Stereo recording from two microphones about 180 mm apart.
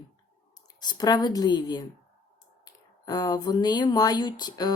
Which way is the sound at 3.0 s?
20° left (ahead or behind).